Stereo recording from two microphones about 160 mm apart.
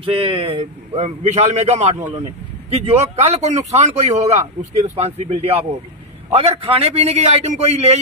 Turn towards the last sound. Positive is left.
turn(degrees=-40)  # may be behind; listen again after turning